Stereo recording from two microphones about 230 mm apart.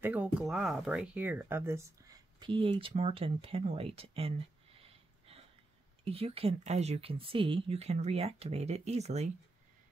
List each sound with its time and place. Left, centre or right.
0.0 s speech: centre; by 4.4 s right
4.8 s wheeze: right
6.0 s speech: right